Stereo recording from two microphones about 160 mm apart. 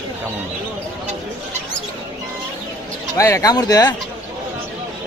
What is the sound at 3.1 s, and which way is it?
Speech, 20° left (ahead or behind).